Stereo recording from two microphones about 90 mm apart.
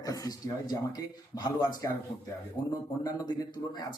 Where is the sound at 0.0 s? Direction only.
40° left (ahead or behind).